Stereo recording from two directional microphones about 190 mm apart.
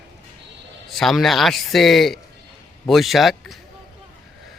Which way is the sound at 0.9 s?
Centre (ahead or behind).